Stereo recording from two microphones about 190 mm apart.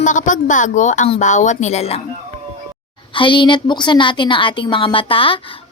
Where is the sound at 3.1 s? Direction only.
25° left (ahead or behind).